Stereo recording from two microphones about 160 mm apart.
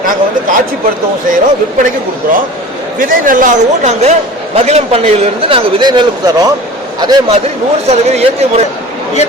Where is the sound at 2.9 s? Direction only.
55° right (ahead or behind); by 7.4 s 25° right (ahead or behind).